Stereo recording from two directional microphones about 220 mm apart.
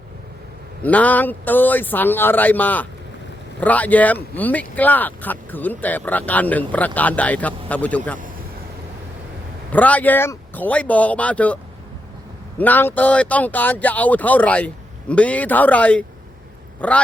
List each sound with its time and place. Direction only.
0.8 s speech: 5° left (ahead or behind)
9.7 s speech: 5° left (ahead or behind)